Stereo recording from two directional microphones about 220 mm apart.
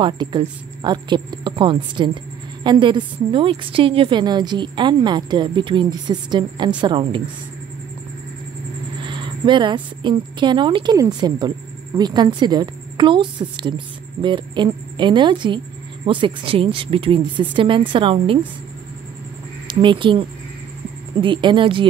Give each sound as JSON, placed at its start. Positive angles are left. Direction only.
{"t": 0.0, "sound": "a woman's voice", "side_deg": -20}
{"t": 9.0, "sound": "a woman's voice", "side_deg": -20}
{"t": 19.7, "sound": "a woman's voice", "side_deg": -20}